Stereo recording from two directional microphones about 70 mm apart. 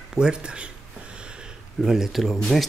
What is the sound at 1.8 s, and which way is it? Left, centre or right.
Speech, centre.